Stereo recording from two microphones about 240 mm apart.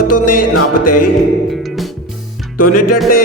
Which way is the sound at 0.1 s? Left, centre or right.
Left.